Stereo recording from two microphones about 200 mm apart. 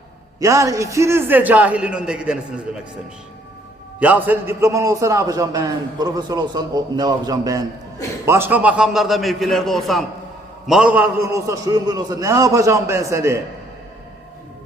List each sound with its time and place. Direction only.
0.3 s a man's voice: 15° right (ahead or behind)
4.0 s a man's voice: 10° right (ahead or behind)